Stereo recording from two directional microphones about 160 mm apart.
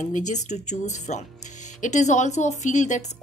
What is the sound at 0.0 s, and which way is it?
A woman's voice, 50° left (ahead or behind).